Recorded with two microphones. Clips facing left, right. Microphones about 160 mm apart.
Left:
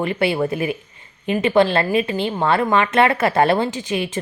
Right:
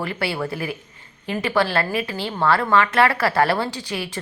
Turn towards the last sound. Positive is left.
turn(degrees=20)  # may be behind; listen again after turning